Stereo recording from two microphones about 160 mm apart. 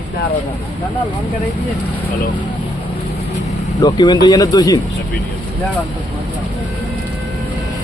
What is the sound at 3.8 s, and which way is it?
Speech, 25° left (ahead or behind).